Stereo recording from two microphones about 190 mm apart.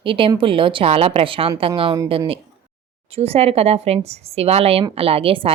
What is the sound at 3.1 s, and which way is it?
A woman's voice, 30° right (ahead or behind).